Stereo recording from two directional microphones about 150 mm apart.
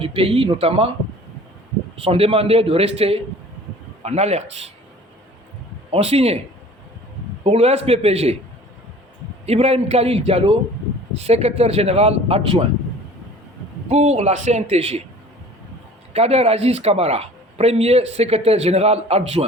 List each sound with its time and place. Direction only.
0.0 s a man's voice: 40° right (ahead or behind)
2.0 s a man's voice: 40° right (ahead or behind)
5.9 s a man's voice: 40° right (ahead or behind)
7.4 s a man's voice: 45° right (ahead or behind)
9.5 s a man's voice: 40° right (ahead or behind)
13.9 s a man's voice: 45° right (ahead or behind)
16.1 s a man's voice: 45° right (ahead or behind)